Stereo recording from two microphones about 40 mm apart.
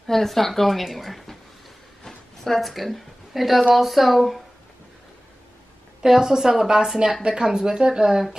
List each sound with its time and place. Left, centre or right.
0.0 s a woman's voice: centre
2.0 s a sound: centre
3.7 s speech: centre
6.0 s speech: centre